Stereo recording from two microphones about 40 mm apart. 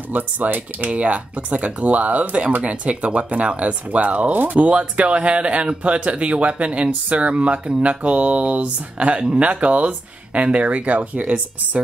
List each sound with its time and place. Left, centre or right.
0.1 s speech: right
0.8 s speech: right
4.6 s speech: right